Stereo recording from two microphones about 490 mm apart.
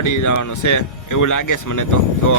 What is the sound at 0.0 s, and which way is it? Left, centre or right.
Speech, left.